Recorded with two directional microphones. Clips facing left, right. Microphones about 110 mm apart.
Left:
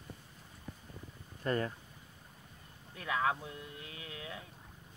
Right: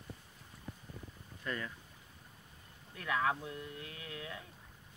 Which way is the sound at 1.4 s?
40° left (ahead or behind).